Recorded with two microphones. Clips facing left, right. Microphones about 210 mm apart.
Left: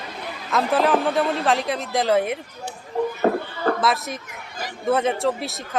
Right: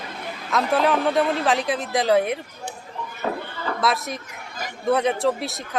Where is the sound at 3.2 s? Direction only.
45° left (ahead or behind).